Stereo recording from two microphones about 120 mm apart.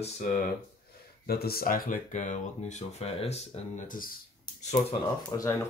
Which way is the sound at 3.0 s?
60° left (ahead or behind).